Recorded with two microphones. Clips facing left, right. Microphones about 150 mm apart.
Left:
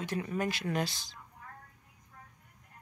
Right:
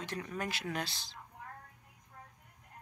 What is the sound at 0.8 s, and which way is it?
Speech, 45° left (ahead or behind).